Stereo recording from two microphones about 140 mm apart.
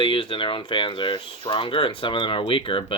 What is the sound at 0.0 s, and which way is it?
Speech, 35° left (ahead or behind).